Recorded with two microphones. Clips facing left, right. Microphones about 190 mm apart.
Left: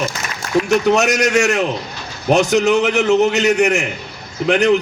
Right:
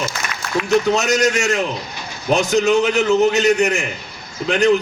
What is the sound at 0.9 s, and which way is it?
A man's voice, 70° left (ahead or behind).